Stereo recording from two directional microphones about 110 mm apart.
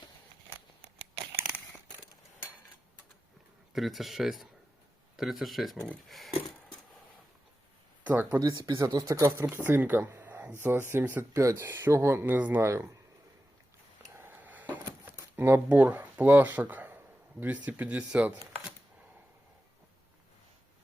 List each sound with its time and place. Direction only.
3.7 s speech: centre (ahead or behind)
8.0 s speech: 15° right (ahead or behind)
8.9 s speech: 30° right (ahead or behind)
14.2 s a sound: 15° right (ahead or behind)
14.8 s shuffling cards: 20° right (ahead or behind)
17.4 s speech: 15° right (ahead or behind)